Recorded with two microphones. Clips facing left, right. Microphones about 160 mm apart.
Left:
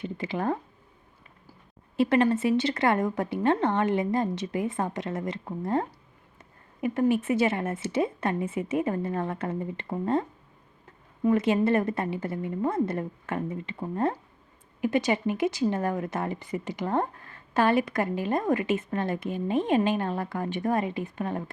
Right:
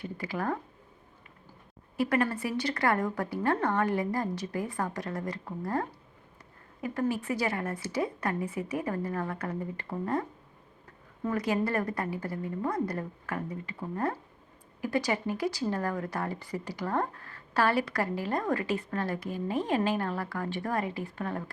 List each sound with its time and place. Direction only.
0.0 s speech: 20° left (ahead or behind)
2.0 s speech: 25° left (ahead or behind)
6.8 s speech: 20° left (ahead or behind)